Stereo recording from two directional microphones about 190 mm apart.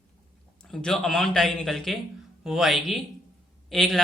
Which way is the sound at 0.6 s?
5° left (ahead or behind).